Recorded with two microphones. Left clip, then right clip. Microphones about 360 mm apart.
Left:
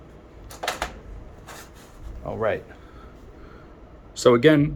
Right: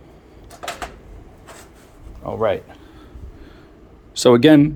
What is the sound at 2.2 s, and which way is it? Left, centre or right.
Speech, right.